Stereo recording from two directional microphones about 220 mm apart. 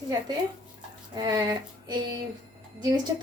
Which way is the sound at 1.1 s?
15° right (ahead or behind).